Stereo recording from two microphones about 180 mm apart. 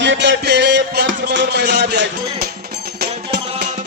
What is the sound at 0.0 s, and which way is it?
Music, 80° right.